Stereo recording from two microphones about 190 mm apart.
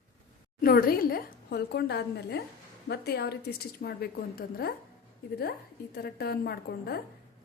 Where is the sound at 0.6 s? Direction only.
50° left (ahead or behind).